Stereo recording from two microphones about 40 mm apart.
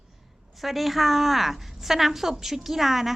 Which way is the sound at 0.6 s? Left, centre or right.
Centre.